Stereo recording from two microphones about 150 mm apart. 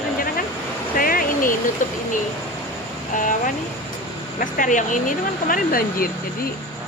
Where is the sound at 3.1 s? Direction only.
60° left (ahead or behind).